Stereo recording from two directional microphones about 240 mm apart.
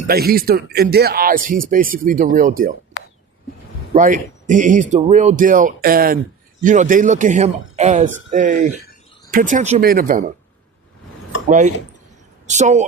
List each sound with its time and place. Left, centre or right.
0.1 s speech: right
3.9 s speech: right
11.4 s speech: right